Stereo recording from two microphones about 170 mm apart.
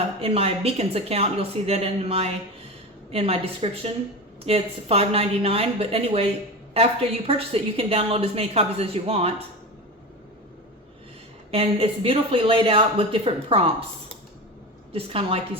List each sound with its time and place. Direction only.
0.2 s a woman's voice: 35° right (ahead or behind)
11.5 s a woman's voice: 35° right (ahead or behind)
14.9 s a woman's voice: 35° right (ahead or behind)